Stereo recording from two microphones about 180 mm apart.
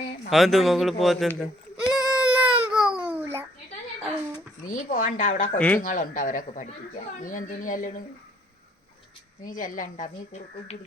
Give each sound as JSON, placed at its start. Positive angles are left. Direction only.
{"t": 0.3, "sound": "a man's voice", "side_deg": 0}
{"t": 1.9, "sound": "baby cry", "side_deg": -5}
{"t": 4.6, "sound": "a woman's voice", "side_deg": 50}
{"t": 5.5, "sound": "speech", "side_deg": 10}
{"t": 5.8, "sound": "a woman's voice", "side_deg": 50}
{"t": 9.5, "sound": "a woman's voice", "side_deg": 50}